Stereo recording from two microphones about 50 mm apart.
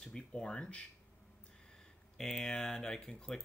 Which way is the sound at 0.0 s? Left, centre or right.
Centre.